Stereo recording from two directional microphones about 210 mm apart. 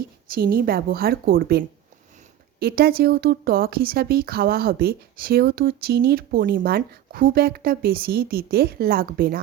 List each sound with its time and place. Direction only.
0.3 s speech: 45° right (ahead or behind)